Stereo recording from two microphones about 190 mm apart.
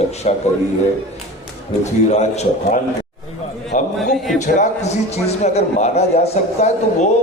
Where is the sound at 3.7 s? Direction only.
40° left (ahead or behind).